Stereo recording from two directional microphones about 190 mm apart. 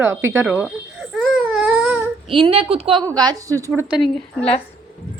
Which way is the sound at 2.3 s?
30° right (ahead or behind).